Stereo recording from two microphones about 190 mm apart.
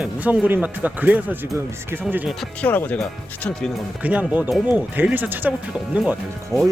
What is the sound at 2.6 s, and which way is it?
Speech, 10° left (ahead or behind).